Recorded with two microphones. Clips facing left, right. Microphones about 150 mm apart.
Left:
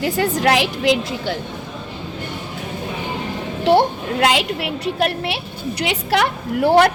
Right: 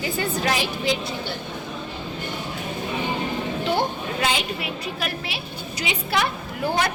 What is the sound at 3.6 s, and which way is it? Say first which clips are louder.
A woman's voice: left 11 dB; 75° left (ahead or behind).